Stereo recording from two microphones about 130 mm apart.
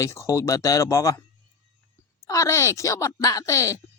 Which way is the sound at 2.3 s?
25° left (ahead or behind).